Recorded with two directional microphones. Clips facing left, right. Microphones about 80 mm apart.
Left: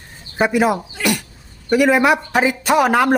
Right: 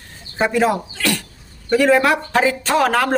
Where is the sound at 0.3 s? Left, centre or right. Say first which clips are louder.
Left 1 dB; centre.